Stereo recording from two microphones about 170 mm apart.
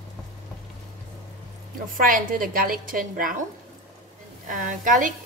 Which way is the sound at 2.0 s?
55° right (ahead or behind).